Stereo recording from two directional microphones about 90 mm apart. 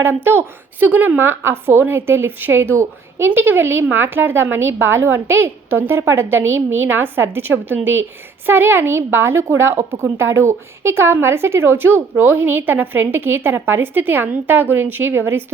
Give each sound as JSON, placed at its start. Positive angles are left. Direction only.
{"t": 0.0, "sound": "a woman's voice", "side_deg": -25}